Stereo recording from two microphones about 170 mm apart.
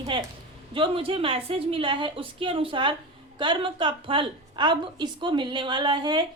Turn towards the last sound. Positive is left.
turn(degrees=-25)  # may be behind; listen again after turning